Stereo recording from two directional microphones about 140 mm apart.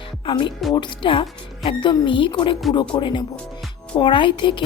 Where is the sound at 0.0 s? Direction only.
35° left (ahead or behind).